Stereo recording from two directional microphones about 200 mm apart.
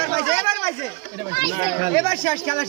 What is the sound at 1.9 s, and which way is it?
Speech, 15° left (ahead or behind).